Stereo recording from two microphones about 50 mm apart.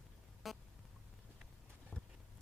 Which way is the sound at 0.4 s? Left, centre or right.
Centre.